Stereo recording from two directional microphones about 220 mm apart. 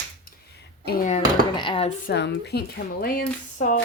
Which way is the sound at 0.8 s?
40° left (ahead or behind).